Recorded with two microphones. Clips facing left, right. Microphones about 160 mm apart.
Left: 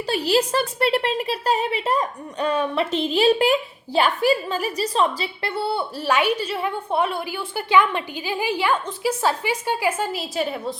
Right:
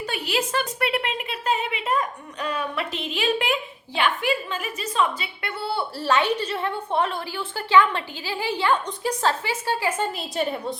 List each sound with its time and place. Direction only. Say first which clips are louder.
0.0 s a woman's voice: left 6 dB; 35° left (ahead or behind); by 10.8 s centre (ahead or behind)